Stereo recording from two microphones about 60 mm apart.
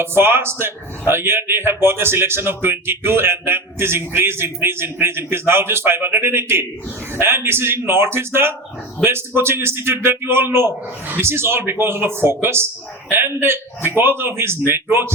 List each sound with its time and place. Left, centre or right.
0.0 s a man's voice: right